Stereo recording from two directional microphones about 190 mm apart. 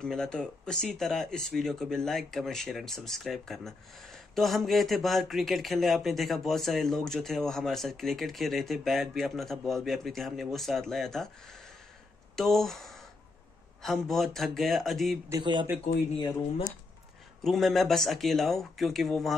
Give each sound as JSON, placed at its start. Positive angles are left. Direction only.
{"t": 0.0, "sound": "speech", "side_deg": 5}
{"t": 12.4, "sound": "speech", "side_deg": 0}
{"t": 15.2, "sound": "speech", "side_deg": -25}
{"t": 17.4, "sound": "speech", "side_deg": 0}